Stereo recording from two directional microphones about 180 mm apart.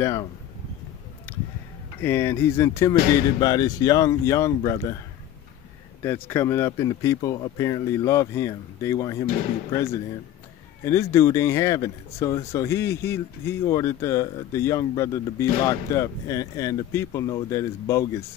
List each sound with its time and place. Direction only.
0.0 s speech: 20° left (ahead or behind)
2.0 s speech: 15° left (ahead or behind)
6.0 s speech: 10° left (ahead or behind)